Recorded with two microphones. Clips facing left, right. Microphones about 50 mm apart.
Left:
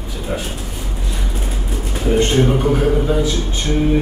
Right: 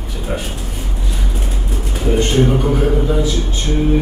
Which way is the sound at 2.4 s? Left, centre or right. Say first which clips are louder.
Even; centre.